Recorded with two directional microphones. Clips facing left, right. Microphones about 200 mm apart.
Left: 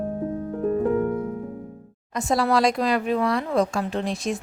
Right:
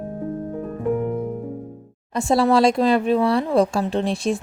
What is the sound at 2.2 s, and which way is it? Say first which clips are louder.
Speech: right 4 dB; 30° right (ahead or behind).